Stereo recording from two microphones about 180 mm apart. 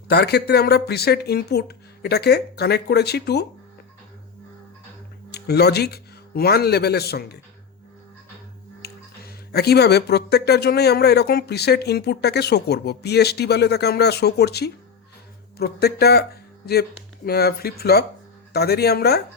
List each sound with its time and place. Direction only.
0.1 s speech: 65° left (ahead or behind)
5.3 s a man's voice: 65° left (ahead or behind)
8.8 s speech: 60° left (ahead or behind)